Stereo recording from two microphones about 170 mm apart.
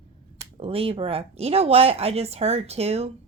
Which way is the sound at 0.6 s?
35° right (ahead or behind).